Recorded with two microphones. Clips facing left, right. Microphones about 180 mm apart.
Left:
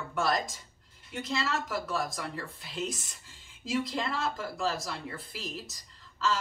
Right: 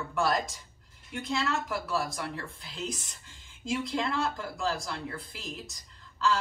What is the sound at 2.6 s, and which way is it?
Speech, centre (ahead or behind).